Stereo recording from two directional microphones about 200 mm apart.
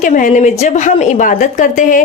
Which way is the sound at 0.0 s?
40° left (ahead or behind).